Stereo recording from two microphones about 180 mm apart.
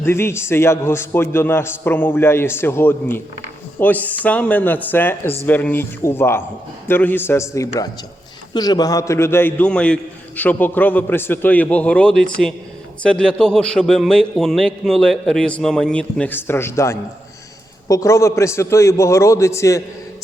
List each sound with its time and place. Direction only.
0.0 s a man's voice: 15° left (ahead or behind)